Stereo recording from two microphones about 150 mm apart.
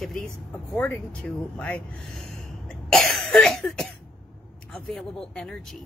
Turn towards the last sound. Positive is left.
turn(degrees=5)  # may be behind; listen again after turning